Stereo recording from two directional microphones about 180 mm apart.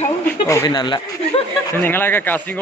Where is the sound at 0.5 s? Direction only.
20° left (ahead or behind).